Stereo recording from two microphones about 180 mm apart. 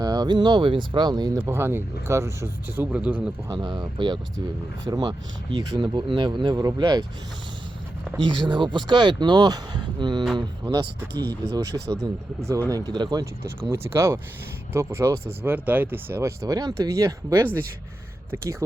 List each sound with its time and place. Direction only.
0.0 s speech: 20° right (ahead or behind)
3.5 s speech: 25° right (ahead or behind)
8.2 s speech: 25° right (ahead or behind)
11.1 s speech: 65° right (ahead or behind)
11.5 s speech: 20° right (ahead or behind)